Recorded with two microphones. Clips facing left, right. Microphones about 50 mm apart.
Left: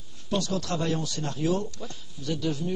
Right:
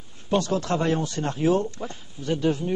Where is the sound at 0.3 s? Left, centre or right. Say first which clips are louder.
Right 5 dB; right.